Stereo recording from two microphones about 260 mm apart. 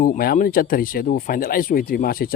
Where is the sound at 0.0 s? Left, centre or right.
Left.